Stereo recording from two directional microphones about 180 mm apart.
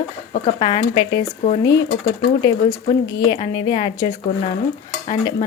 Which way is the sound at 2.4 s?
20° left (ahead or behind).